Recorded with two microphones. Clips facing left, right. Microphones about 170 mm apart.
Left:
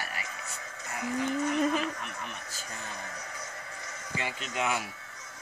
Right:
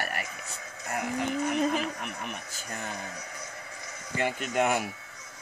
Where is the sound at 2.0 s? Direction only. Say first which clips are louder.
Right 3 dB; 60° right (ahead or behind).